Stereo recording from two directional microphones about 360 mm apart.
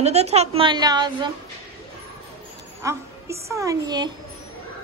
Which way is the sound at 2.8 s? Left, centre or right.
Centre.